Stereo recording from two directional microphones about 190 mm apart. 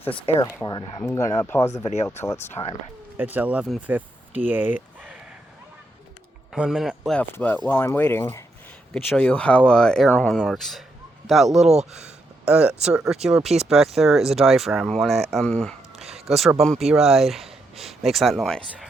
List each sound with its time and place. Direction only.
0.3 s speech: 20° left (ahead or behind)
1.8 s speech: 35° left (ahead or behind)
2.2 s speech: 15° left (ahead or behind)
3.2 s speech: 10° right (ahead or behind)
4.9 s a sound: 5° right (ahead or behind)
6.5 s speech: centre (ahead or behind)
11.7 s speech: 35° right (ahead or behind)
12.5 s speech: 5° right (ahead or behind)